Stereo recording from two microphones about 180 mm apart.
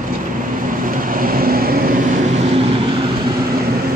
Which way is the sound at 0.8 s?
50° right (ahead or behind).